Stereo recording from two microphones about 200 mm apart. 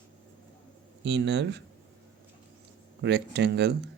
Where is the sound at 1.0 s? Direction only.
60° right (ahead or behind).